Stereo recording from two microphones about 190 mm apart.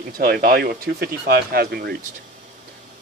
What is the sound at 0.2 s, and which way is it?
Speech, 50° right (ahead or behind).